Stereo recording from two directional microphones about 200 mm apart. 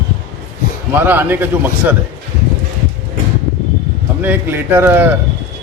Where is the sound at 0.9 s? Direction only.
10° right (ahead or behind).